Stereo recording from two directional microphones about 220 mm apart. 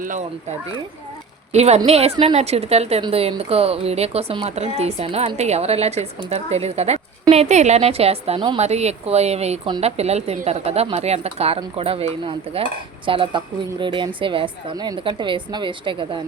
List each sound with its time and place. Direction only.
0.0 s speech: 35° right (ahead or behind)
1.5 s a woman's voice: 30° right (ahead or behind)